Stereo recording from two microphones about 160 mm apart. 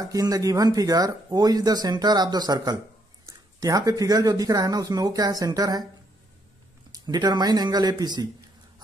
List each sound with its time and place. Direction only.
0.0 s speech: 20° right (ahead or behind)
6.9 s speech: 25° right (ahead or behind)